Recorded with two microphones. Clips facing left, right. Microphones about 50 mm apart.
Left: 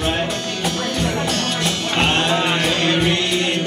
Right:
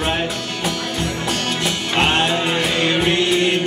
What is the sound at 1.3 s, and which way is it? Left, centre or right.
Music, centre.